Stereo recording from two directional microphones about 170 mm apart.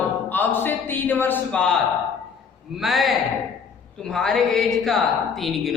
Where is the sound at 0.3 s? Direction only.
10° left (ahead or behind).